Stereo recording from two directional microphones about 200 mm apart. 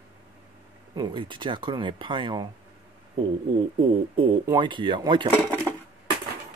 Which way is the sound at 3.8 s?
25° right (ahead or behind).